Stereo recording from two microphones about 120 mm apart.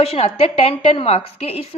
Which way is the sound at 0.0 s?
60° left (ahead or behind).